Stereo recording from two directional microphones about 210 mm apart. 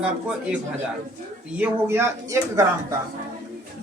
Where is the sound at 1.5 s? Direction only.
10° right (ahead or behind).